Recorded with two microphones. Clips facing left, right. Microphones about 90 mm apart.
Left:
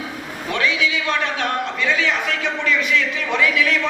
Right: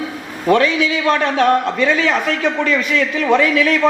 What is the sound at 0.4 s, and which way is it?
A man's voice, 40° right (ahead or behind).